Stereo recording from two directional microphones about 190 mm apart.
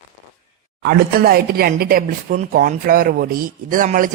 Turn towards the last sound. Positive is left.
turn(degrees=-45)  # may be behind; listen again after turning